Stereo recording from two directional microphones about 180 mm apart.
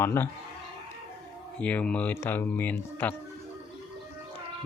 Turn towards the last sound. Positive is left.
turn(degrees=10)  # may be behind; listen again after turning